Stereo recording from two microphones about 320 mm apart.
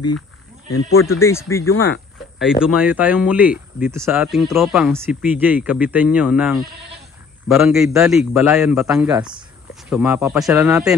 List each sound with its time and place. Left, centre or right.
0.7 s speech: left
1.2 s speech: centre
1.7 s a sound: left
2.4 s speech: centre
9.1 s speech: centre
9.8 s speech: centre